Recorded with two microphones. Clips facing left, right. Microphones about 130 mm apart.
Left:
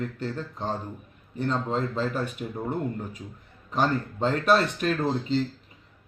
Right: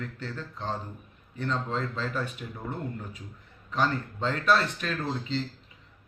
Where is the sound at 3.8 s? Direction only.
45° left (ahead or behind).